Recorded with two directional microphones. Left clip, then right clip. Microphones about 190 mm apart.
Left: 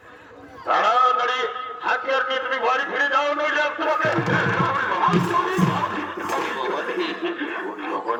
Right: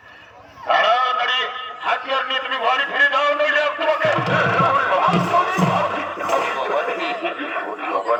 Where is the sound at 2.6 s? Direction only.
10° right (ahead or behind).